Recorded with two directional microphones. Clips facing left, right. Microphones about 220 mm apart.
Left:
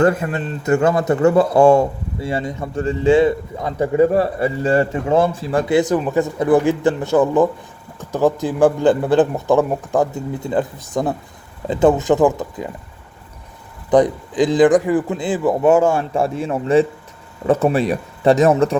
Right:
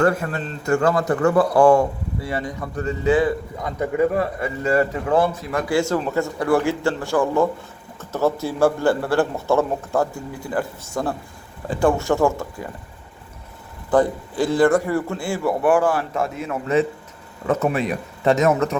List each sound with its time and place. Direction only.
0.0 s a man's voice: 20° left (ahead or behind)
13.9 s a man's voice: 20° left (ahead or behind)